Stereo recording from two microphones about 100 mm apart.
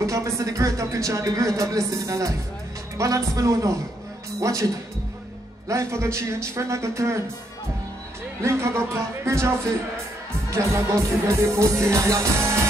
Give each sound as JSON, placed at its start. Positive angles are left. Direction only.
{"t": 0.0, "sound": "speech", "side_deg": -30}
{"t": 5.7, "sound": "music", "side_deg": -30}
{"t": 8.4, "sound": "music", "side_deg": -30}